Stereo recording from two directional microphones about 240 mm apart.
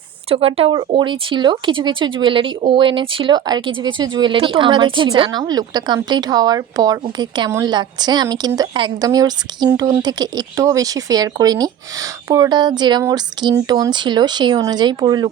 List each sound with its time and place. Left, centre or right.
0.3 s speech: right